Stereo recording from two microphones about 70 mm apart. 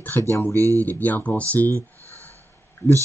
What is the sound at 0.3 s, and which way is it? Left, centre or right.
Speech, left.